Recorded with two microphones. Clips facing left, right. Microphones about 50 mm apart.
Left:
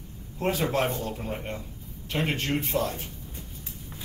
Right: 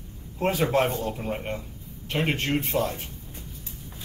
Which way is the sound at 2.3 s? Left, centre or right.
Right.